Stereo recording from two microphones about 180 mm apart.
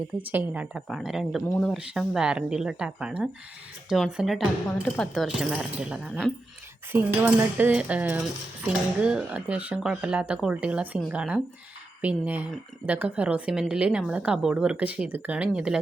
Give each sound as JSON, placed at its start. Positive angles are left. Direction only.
{"t": 0.2, "sound": "speech", "side_deg": -10}
{"t": 6.9, "sound": "cutlery", "side_deg": -10}